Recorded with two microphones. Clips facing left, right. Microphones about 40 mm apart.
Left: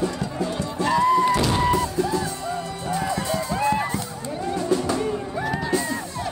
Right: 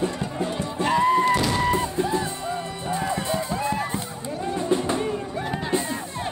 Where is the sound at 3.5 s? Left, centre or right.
Left.